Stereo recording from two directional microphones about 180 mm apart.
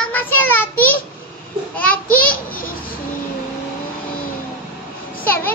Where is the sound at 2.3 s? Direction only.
50° left (ahead or behind).